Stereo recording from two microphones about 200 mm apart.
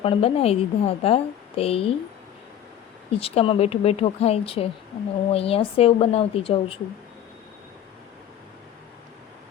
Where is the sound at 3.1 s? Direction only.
30° left (ahead or behind).